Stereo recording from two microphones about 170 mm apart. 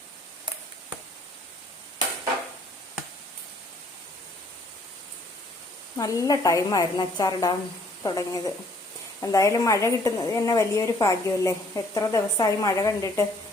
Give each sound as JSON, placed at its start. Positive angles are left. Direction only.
{"t": 6.0, "sound": "a woman's voice", "side_deg": 20}